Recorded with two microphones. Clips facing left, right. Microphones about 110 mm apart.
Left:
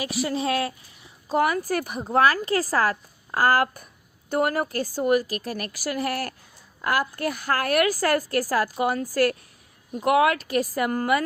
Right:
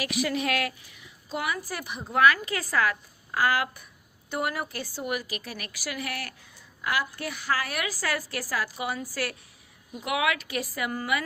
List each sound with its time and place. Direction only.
0.0 s a woman's voice: 30° left (ahead or behind); by 11.2 s 50° left (ahead or behind)